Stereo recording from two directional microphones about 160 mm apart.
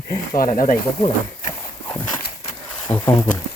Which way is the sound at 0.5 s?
40° left (ahead or behind).